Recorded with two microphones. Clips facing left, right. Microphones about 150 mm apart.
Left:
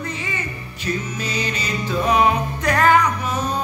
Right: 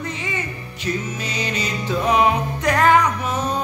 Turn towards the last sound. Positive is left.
turn(degrees=-20)  # may be behind; listen again after turning